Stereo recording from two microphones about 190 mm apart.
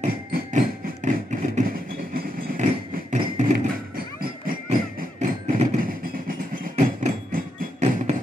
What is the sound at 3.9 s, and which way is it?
Music, 50° right (ahead or behind).